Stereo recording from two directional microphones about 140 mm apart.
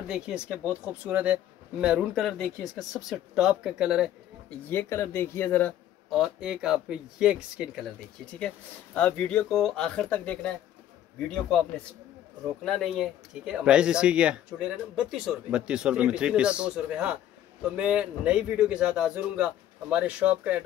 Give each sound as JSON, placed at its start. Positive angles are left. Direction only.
{"t": 0.1, "sound": "speech", "side_deg": -5}
{"t": 4.6, "sound": "speech", "side_deg": 15}
{"t": 6.0, "sound": "speech", "side_deg": 0}
{"t": 8.4, "sound": "speech", "side_deg": 10}
{"t": 12.6, "sound": "speech", "side_deg": 0}